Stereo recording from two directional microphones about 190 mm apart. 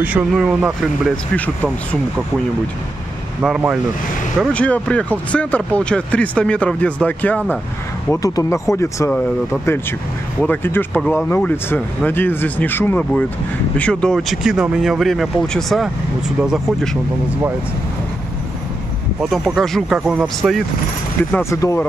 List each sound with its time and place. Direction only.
0.0 s speech: 5° right (ahead or behind)
1.3 s speech: 10° left (ahead or behind)
3.4 s speech: 5° right (ahead or behind)
19.2 s speech: centre (ahead or behind)
21.5 s speech: 15° left (ahead or behind)